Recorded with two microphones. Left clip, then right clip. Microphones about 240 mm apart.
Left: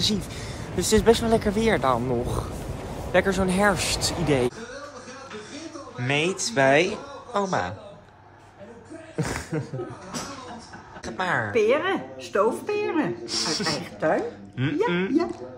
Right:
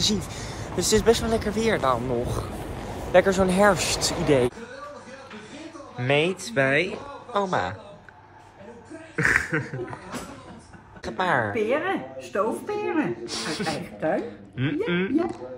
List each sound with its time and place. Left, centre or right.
0.0 s speech: centre
5.9 s speech: centre
9.1 s a sound: centre
11.1 s speech: centre